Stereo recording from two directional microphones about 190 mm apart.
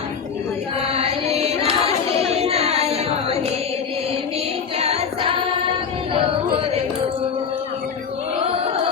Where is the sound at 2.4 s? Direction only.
35° right (ahead or behind).